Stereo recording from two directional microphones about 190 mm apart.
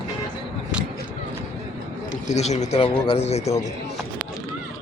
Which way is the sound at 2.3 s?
35° left (ahead or behind).